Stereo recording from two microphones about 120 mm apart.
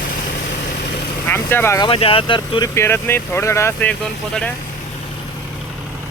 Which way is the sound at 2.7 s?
20° left (ahead or behind).